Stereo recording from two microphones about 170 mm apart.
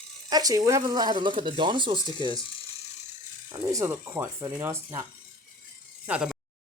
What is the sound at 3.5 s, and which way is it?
Speech, 20° right (ahead or behind).